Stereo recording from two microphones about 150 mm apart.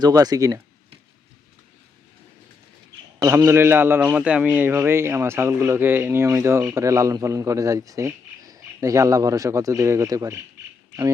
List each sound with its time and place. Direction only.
0.0 s a man's voice: 25° right (ahead or behind)
3.2 s a man's voice: 20° right (ahead or behind)